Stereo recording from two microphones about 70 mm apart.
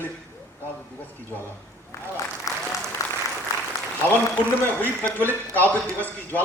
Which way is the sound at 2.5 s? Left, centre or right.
Left.